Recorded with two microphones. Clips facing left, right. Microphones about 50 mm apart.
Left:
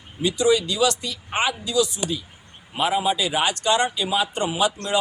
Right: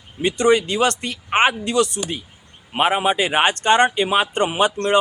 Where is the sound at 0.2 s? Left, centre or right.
Right.